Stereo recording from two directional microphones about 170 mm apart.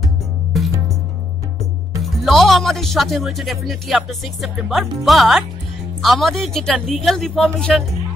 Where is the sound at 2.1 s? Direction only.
Centre (ahead or behind).